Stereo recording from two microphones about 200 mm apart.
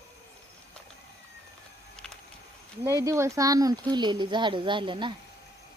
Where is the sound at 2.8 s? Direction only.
15° right (ahead or behind).